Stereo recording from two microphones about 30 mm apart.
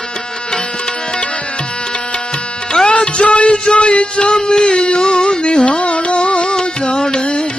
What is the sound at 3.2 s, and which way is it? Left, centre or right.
Music, left.